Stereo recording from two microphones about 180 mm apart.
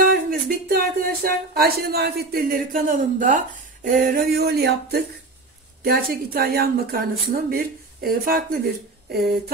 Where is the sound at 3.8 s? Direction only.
50° right (ahead or behind).